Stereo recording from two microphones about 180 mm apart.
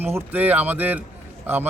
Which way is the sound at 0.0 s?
10° right (ahead or behind).